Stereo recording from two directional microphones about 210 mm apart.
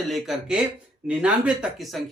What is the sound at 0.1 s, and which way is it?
Speech, centre (ahead or behind).